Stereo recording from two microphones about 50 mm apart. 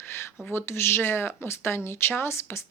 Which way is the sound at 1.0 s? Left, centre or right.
Left.